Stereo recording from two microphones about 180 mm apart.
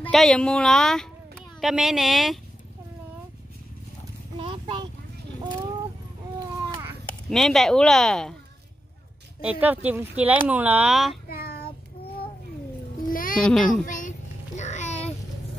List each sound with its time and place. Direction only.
0.0 s speech: centre (ahead or behind)
4.4 s a sound: 30° right (ahead or behind)
7.2 s speech: centre (ahead or behind)
9.4 s speech: 10° right (ahead or behind)
11.2 s child singing: 55° left (ahead or behind)
13.1 s music: 50° left (ahead or behind)
13.4 s speech: 5° left (ahead or behind)
13.7 s a child's voice: 45° left (ahead or behind)
14.6 s a sound: 40° left (ahead or behind)